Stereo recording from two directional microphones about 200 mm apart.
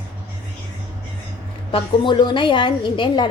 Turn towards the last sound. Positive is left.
turn(degrees=25)  # may be behind; listen again after turning